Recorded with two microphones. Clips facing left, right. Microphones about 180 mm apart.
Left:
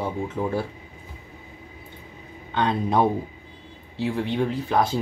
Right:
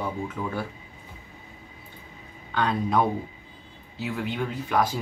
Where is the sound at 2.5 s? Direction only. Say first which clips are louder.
Left 2 dB; 25° left (ahead or behind).